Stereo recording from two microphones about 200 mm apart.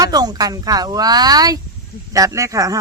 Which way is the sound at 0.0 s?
20° right (ahead or behind).